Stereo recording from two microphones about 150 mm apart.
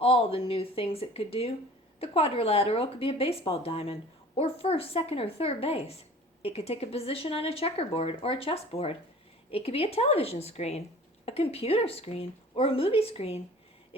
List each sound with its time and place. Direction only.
0.0 s a woman's voice: 40° left (ahead or behind)